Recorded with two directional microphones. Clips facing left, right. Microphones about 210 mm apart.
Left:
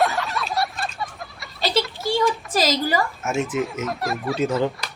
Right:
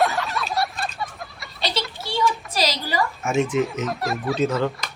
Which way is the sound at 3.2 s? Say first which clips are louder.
Right 2 dB; 5° left (ahead or behind).